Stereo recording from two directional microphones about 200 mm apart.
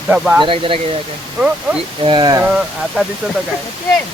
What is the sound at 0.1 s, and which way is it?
Speech, 5° right (ahead or behind).